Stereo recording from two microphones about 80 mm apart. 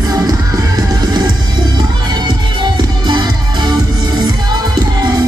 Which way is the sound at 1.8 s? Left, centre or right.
Right.